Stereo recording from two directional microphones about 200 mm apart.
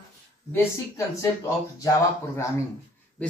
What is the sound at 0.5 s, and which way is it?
Speech, 15° left (ahead or behind).